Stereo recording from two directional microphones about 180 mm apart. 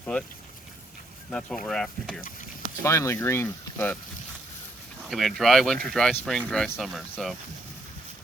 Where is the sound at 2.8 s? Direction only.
15° left (ahead or behind).